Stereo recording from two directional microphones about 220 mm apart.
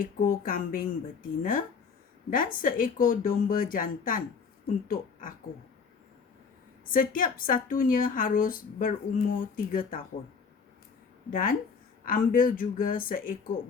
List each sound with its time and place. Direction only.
0.0 s a woman's voice: 40° left (ahead or behind)
6.9 s a woman's voice: 40° left (ahead or behind)
11.3 s a woman's voice: 40° left (ahead or behind)